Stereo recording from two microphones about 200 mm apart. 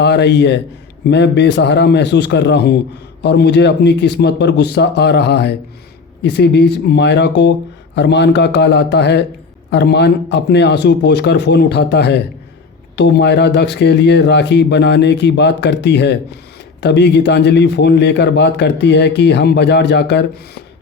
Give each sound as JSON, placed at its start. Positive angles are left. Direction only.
{"t": 0.0, "sound": "a man's voice", "side_deg": 60}